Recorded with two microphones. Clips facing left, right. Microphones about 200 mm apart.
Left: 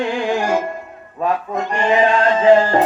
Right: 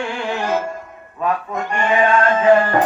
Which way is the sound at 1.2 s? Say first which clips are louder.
Left 2 dB; 25° left (ahead or behind).